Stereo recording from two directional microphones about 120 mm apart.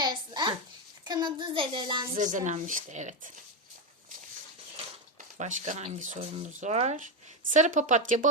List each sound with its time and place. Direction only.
0.0 s a sound: 35° right (ahead or behind)
1.0 s a child's voice: 40° right (ahead or behind)
2.1 s speech: 90° right
5.1 s speech: 90° right
6.6 s speech: 70° right (ahead or behind); by 8.3 s 90° right